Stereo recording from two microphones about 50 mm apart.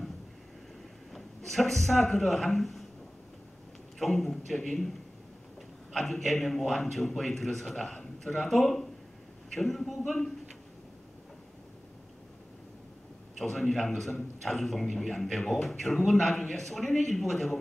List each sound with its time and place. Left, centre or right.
1.1 s a man's voice: centre
4.0 s a man's voice: centre
5.9 s a man's voice: centre
13.4 s a man's voice: centre